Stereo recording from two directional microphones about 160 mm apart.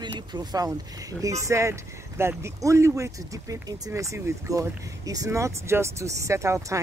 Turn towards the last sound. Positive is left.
turn(degrees=-15)  # may be behind; listen again after turning